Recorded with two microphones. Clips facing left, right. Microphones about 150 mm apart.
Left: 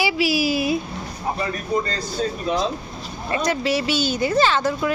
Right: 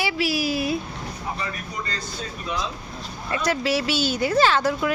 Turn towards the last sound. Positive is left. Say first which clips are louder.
# even
turn(degrees=-5)  # may be behind; listen again after turning